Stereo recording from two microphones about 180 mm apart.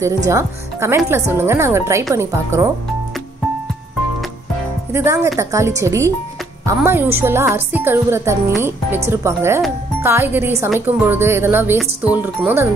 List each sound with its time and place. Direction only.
0.3 s a woman's voice: 15° right (ahead or behind)
4.9 s a woman's voice: 15° right (ahead or behind)